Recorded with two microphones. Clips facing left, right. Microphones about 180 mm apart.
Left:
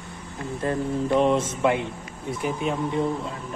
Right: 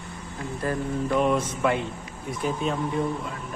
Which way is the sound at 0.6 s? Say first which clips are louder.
Left 2 dB; 25° left (ahead or behind).